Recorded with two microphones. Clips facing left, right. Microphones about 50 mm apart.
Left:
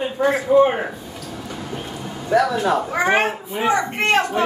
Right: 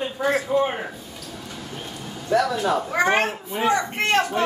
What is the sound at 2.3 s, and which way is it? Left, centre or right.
A woman's voice, centre.